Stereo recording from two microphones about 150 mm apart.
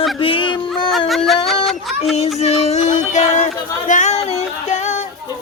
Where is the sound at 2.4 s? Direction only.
45° left (ahead or behind).